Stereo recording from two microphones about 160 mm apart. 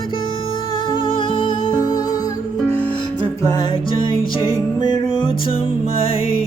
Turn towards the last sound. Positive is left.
turn(degrees=35)  # may be behind; listen again after turning